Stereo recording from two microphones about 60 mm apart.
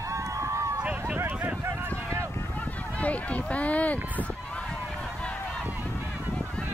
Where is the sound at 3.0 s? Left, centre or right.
Left.